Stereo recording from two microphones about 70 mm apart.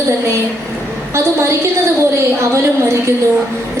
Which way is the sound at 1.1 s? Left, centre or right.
Right.